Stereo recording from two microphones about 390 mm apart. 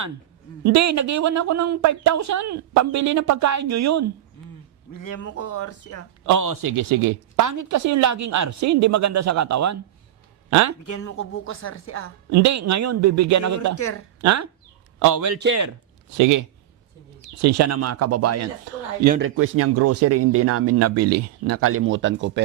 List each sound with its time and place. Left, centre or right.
0.6 s speech: right
4.9 s a woman's voice: left
6.2 s speech: right
11.0 s a woman's voice: left
12.3 s speech: right
13.7 s a woman's voice: left
14.2 s a man's voice: right
19.0 s speech: right
19.4 s speech: right